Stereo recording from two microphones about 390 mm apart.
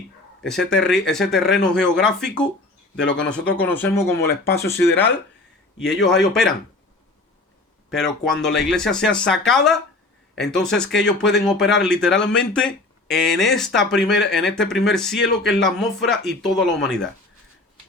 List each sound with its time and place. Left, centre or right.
0.4 s speech: centre
4.3 s speech: left
4.7 s speech: centre
7.9 s speech: centre